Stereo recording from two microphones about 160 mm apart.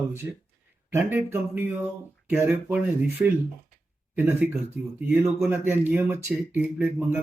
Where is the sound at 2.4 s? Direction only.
15° right (ahead or behind).